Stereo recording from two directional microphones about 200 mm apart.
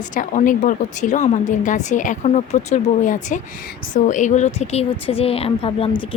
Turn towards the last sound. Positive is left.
turn(degrees=25)  # may be behind; listen again after turning